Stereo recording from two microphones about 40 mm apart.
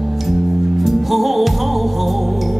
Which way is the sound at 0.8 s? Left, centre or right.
Centre.